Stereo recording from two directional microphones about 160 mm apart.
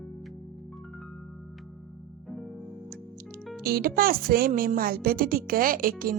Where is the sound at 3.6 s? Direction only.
70° right (ahead or behind).